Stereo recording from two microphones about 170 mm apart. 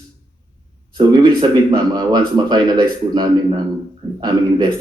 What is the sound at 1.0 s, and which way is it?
Speech, 25° right (ahead or behind).